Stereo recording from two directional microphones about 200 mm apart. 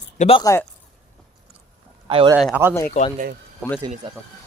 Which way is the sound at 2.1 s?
25° right (ahead or behind).